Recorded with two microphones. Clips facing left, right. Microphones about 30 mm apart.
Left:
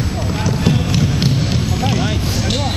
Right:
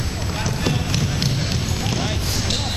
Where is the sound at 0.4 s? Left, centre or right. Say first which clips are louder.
Left 5 dB; centre.